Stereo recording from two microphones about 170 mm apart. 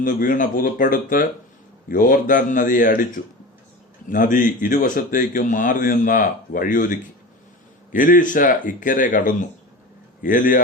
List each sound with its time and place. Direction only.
0.0 s speech: 50° left (ahead or behind)
4.1 s speech: 50° left (ahead or behind)